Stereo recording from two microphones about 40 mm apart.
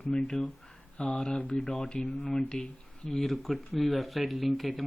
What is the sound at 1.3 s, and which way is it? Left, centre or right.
Speech, left.